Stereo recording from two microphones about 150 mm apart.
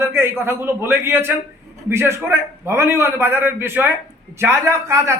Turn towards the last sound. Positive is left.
turn(degrees=-15)  # may be behind; listen again after turning